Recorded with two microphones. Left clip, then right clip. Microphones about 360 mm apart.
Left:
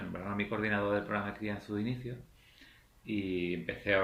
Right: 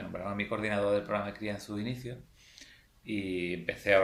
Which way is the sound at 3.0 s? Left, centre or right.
Centre.